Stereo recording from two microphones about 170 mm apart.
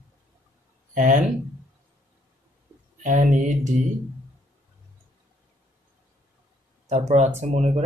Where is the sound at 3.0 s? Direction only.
50° right (ahead or behind).